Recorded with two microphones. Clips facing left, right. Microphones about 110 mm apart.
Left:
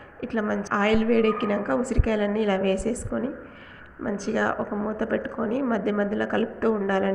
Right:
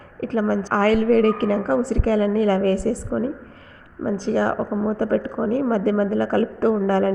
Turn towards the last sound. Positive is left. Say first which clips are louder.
# right 4 dB
turn(degrees=-35)  # may be behind; listen again after turning